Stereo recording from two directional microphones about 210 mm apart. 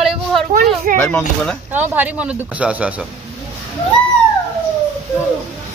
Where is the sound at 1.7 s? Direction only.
10° right (ahead or behind).